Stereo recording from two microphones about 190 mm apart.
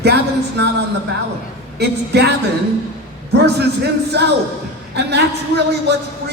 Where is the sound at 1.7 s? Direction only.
60° right (ahead or behind).